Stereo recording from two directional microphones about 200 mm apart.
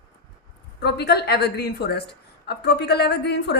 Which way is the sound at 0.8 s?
55° left (ahead or behind).